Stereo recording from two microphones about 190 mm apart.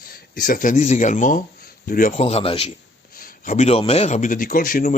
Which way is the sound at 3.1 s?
45° left (ahead or behind).